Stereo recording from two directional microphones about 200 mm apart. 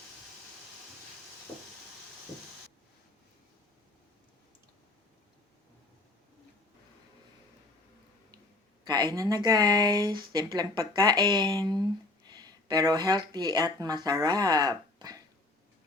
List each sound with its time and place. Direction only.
8.9 s speech: 20° right (ahead or behind)